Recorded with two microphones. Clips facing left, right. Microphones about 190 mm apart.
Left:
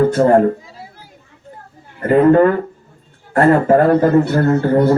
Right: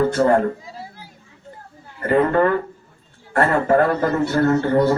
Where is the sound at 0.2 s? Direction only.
25° left (ahead or behind).